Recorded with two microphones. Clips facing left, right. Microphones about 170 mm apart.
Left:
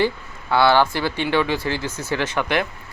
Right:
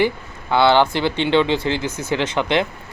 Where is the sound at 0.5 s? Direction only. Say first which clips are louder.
Right 2 dB; 20° right (ahead or behind).